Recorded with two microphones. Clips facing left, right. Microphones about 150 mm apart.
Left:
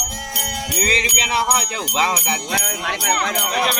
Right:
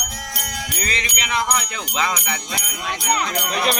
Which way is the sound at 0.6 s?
30° left (ahead or behind).